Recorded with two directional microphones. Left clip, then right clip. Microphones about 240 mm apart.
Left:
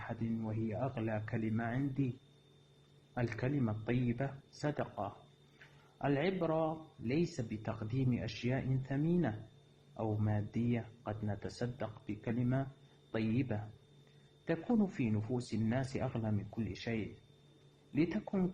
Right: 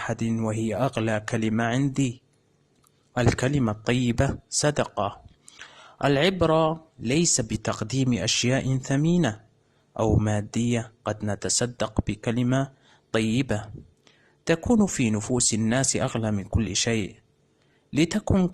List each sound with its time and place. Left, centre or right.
0.0 s a man's voice: right
3.2 s a man's voice: right